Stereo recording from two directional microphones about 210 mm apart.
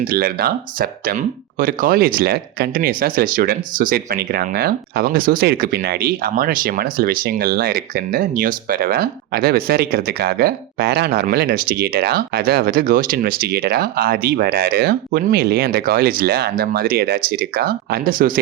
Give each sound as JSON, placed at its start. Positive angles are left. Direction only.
{"t": 0.0, "sound": "speech", "side_deg": -45}